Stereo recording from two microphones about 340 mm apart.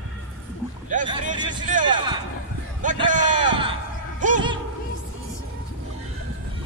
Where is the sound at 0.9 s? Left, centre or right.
Right.